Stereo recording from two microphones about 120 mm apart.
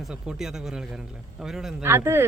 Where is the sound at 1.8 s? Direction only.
20° right (ahead or behind).